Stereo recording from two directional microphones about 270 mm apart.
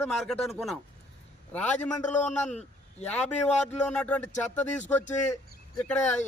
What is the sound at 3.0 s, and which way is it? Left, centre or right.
Speech, left.